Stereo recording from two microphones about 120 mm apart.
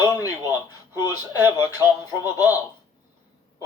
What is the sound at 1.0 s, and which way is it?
A man's voice, 20° right (ahead or behind).